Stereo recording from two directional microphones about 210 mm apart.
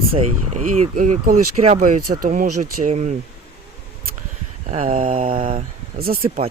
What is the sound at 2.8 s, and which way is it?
Speech, 35° right (ahead or behind).